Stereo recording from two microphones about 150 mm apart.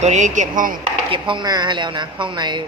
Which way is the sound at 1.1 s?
30° right (ahead or behind).